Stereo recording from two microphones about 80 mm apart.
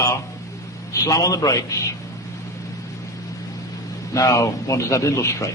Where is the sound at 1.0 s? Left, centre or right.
Left.